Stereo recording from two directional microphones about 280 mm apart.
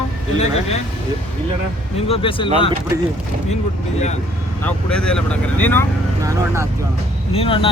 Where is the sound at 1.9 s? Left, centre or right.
Centre.